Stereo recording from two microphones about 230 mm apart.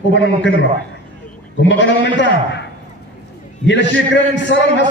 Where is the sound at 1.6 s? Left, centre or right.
Left.